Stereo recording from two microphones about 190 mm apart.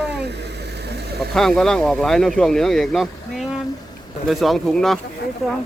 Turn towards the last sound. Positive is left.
turn(degrees=0)  # may be behind; listen again after turning